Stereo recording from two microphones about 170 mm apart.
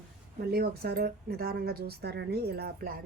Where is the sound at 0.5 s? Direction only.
65° right (ahead or behind).